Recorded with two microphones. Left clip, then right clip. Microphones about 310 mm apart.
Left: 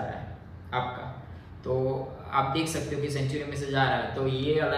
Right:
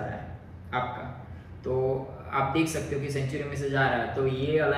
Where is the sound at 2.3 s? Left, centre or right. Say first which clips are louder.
Even; left.